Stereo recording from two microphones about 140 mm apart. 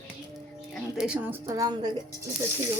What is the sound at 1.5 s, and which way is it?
Speech, 25° right (ahead or behind).